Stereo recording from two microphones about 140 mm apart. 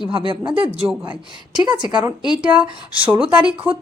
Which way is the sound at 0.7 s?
5° right (ahead or behind).